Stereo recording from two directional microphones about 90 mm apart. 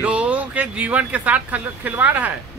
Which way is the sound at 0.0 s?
15° right (ahead or behind).